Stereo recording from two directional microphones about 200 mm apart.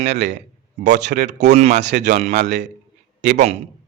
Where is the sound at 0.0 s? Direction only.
60° right (ahead or behind).